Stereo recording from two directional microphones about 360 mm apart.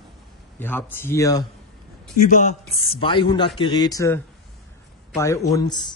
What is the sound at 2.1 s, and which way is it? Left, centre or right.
Speech, left.